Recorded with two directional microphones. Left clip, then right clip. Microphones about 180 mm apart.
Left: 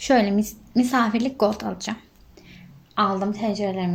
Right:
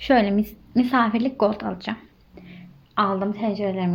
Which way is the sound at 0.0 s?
10° left (ahead or behind).